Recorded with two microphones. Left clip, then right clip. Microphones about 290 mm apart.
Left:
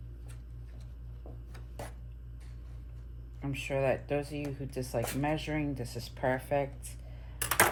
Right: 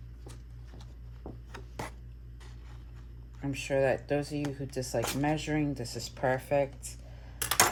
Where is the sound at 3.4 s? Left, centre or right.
Right.